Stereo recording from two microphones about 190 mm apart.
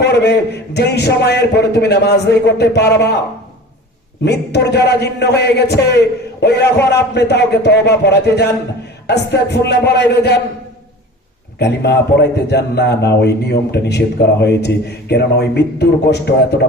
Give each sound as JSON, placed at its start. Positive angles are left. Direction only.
{"t": 0.0, "sound": "a man's voice", "side_deg": 60}
{"t": 4.3, "sound": "a man's voice", "side_deg": 60}
{"t": 11.6, "sound": "a man's voice", "side_deg": 60}
{"t": 15.1, "sound": "a man's voice", "side_deg": 60}